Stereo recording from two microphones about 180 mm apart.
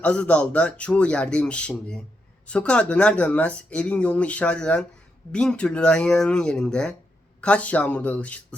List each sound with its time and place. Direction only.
0.0 s speech: 5° left (ahead or behind)